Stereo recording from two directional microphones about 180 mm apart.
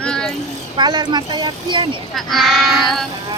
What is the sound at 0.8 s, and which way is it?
Speech, 25° right (ahead or behind).